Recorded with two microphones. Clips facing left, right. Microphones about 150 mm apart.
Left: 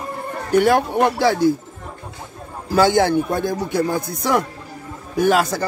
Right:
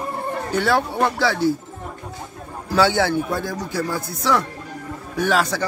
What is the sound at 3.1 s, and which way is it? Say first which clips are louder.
A man's voice: left 4 dB; 50° left (ahead or behind).